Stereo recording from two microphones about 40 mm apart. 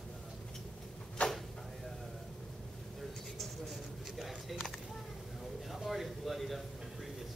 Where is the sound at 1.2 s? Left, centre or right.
Left.